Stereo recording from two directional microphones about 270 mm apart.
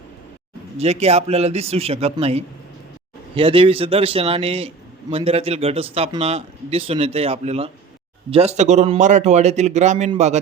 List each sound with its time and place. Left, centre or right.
0.8 s speech: right